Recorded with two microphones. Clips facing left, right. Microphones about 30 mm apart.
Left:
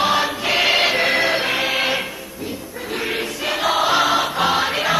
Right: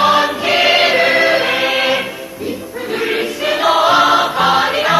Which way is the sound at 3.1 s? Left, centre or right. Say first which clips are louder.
Right 6 dB; centre.